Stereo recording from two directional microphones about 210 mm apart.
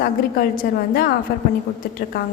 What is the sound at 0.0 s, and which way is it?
A woman's voice, 45° left (ahead or behind).